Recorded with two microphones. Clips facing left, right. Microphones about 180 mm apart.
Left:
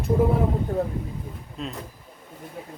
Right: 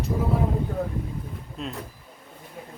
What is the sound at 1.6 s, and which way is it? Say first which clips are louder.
Speech: left 1 dB; centre (ahead or behind).